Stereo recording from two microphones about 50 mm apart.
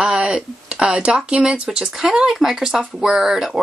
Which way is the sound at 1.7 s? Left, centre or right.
Centre.